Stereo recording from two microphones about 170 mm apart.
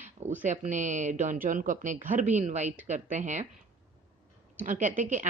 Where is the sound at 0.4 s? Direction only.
45° right (ahead or behind).